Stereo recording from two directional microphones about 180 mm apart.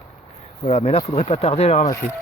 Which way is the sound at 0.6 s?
35° left (ahead or behind).